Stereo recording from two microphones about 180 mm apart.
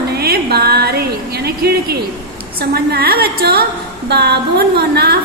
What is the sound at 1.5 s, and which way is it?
A woman's voice, 60° right (ahead or behind).